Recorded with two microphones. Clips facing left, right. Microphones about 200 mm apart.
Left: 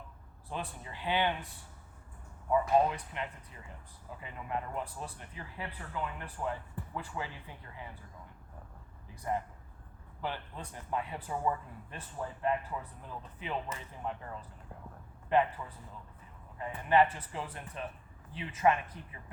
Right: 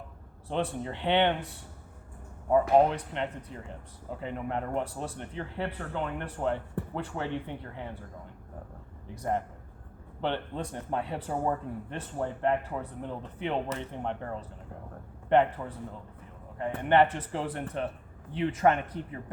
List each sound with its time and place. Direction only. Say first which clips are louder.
0.4 s a man's voice: right 10 dB; 80° right
2.5 s speech: right 5 dB; 65° right (ahead or behind)
10.2 s speech: right 8 dB; 75° right (ahead or behind)
11.3 s speech: right 3 dB; 50° right (ahead or behind)
11.9 s speech: right 6 dB; 75° right (ahead or behind)
15.3 s speech: right 5 dB; 75° right (ahead or behind)